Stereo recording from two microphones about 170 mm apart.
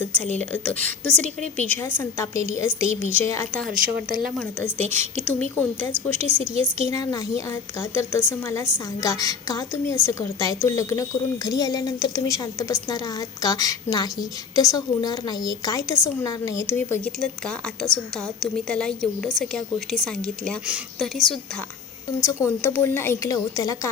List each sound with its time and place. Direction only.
0.0 s a woman's voice: 10° left (ahead or behind)
17.2 s a woman's voice: centre (ahead or behind)
22.4 s a woman's voice: 15° left (ahead or behind)